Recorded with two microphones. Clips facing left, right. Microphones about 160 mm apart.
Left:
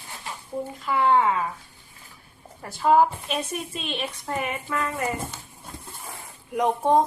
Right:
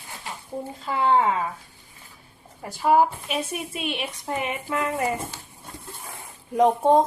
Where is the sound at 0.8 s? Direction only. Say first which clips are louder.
Even; 30° right (ahead or behind).